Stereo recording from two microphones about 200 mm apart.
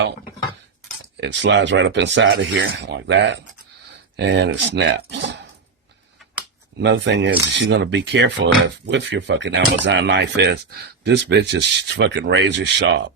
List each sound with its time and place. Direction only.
1.1 s speech: 60° right (ahead or behind)
6.7 s speech: 65° right (ahead or behind)